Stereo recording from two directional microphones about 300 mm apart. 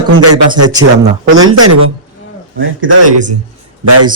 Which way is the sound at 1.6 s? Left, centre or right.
Right.